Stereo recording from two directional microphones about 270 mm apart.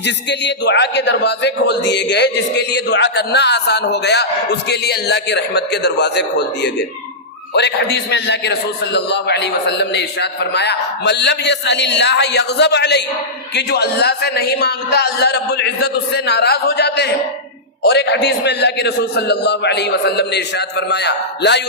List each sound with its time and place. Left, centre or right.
0.0 s a man's voice: left